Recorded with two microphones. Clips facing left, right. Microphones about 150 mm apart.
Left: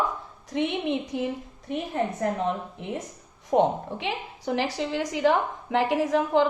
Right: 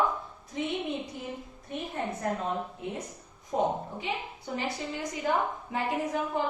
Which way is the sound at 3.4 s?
80° left.